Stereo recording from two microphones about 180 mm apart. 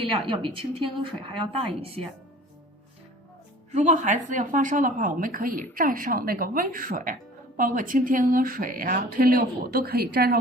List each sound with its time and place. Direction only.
0.3 s speech: 30° right (ahead or behind)
3.7 s speech: 40° right (ahead or behind); by 10.3 s 55° right (ahead or behind)